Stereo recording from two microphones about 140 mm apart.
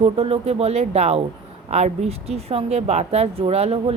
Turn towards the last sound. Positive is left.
turn(degrees=-45)  # may be behind; listen again after turning